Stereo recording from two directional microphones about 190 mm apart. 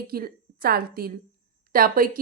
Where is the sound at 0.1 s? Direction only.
50° right (ahead or behind).